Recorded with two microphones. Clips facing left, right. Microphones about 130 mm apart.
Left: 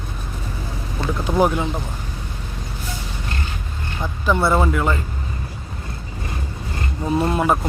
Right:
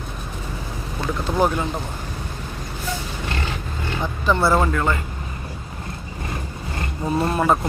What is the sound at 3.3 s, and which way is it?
Vehicle, 90° right.